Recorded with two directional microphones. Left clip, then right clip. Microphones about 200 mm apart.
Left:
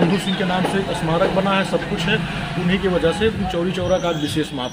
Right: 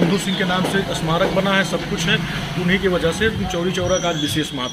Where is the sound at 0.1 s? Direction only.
Centre (ahead or behind).